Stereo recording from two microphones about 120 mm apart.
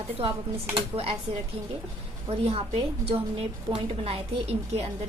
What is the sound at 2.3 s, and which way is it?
A woman's voice, 60° right (ahead or behind).